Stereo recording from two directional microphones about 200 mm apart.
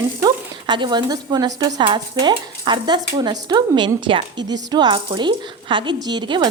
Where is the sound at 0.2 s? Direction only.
20° right (ahead or behind).